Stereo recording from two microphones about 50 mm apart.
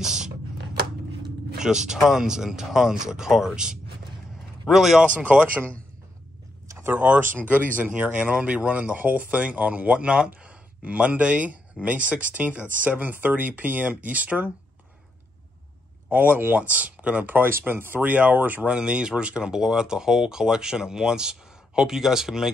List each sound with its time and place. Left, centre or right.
0.0 s a sound: centre
1.6 s speech: centre
5.1 s speech: right
6.8 s speech: right
16.1 s speech: right
18.7 s speech: centre